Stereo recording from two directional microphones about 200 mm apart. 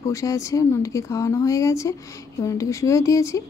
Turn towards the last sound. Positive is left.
turn(degrees=15)  # may be behind; listen again after turning